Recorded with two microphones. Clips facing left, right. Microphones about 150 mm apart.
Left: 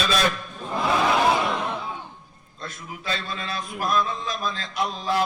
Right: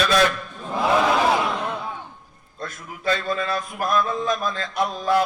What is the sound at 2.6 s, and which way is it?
Mantra, 50° right (ahead or behind).